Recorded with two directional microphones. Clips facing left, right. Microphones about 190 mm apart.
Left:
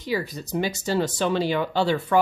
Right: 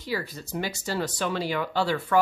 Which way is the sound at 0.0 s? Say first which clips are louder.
Left 4 dB; 20° left (ahead or behind).